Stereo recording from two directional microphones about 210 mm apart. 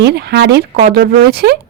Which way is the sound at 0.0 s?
50° right (ahead or behind).